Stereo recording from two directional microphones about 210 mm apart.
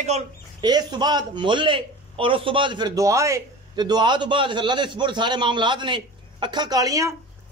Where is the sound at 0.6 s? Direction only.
20° right (ahead or behind).